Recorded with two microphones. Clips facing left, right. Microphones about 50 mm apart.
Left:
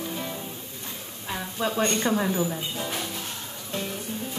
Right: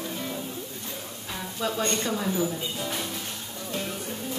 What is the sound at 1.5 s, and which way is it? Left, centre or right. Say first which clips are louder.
Speech: left 2 dB; left.